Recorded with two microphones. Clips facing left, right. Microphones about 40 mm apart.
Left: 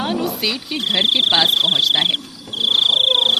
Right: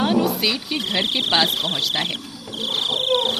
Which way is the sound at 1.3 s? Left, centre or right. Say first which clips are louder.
Left 4 dB; centre.